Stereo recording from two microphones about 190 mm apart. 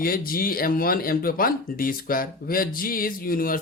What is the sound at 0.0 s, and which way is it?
Speech, 50° left (ahead or behind).